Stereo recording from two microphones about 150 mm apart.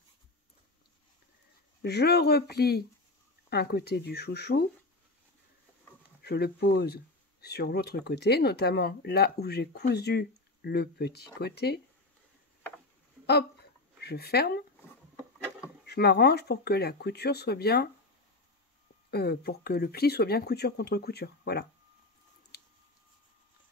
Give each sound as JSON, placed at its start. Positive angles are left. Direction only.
{"t": 1.8, "sound": "speech", "side_deg": 90}
{"t": 6.2, "sound": "speech", "side_deg": 90}
{"t": 14.0, "sound": "speech", "side_deg": 90}
{"t": 15.8, "sound": "speech", "side_deg": 90}
{"t": 19.0, "sound": "speech", "side_deg": 90}
{"t": 22.5, "sound": "a sound", "side_deg": 90}